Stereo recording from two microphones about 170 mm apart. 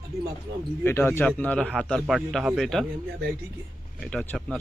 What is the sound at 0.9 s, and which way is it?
A man's voice, 15° left (ahead or behind).